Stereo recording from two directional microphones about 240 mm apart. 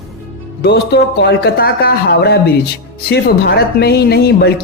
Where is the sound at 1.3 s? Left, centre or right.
Left.